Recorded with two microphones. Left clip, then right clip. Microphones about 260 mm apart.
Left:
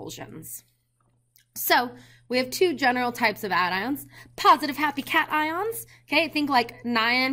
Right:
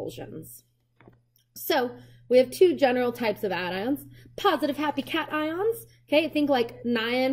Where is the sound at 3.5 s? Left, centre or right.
Centre.